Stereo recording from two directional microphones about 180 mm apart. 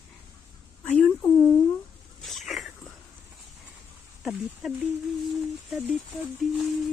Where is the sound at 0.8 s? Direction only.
5° left (ahead or behind).